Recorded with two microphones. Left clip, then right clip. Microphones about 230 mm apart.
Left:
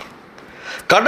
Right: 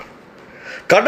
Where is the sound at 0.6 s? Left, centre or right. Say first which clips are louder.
Right 1 dB; left.